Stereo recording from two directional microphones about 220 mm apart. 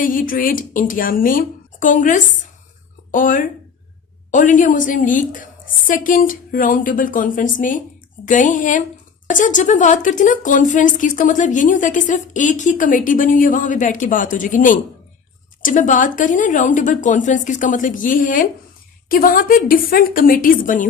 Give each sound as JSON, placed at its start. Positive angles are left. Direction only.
{"t": 0.0, "sound": "a woman's voice", "side_deg": 40}